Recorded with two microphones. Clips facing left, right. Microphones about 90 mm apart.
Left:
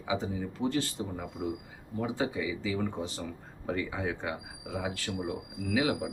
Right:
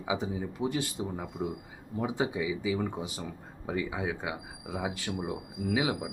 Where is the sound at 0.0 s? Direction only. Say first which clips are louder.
Even; 15° right (ahead or behind).